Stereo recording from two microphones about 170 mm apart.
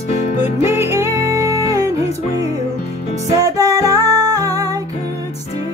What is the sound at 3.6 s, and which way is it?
Music, 20° right (ahead or behind).